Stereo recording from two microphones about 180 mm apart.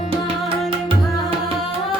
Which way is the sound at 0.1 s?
30° right (ahead or behind).